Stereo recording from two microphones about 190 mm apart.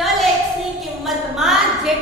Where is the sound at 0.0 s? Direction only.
Centre (ahead or behind).